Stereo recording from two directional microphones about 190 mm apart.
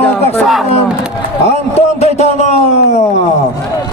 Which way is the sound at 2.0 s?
35° left (ahead or behind).